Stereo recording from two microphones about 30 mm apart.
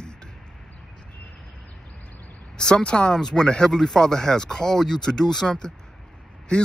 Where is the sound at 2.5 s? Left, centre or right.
Left.